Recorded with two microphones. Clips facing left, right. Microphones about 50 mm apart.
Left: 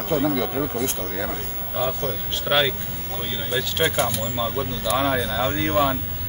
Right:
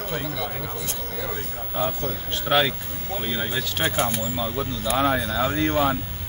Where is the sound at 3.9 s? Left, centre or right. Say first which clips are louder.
Left 1 dB; right.